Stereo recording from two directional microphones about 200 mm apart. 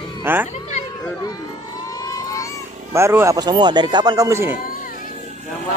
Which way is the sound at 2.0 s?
15° left (ahead or behind).